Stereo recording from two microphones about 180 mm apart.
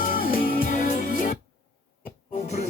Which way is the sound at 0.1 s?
50° left (ahead or behind).